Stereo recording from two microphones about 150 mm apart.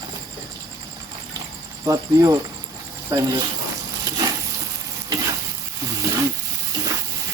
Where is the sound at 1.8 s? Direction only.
25° right (ahead or behind).